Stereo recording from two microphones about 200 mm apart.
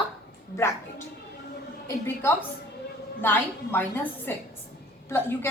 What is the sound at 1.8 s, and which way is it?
A woman's voice, 10° left (ahead or behind).